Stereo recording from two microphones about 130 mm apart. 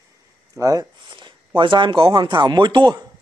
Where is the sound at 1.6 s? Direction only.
40° right (ahead or behind).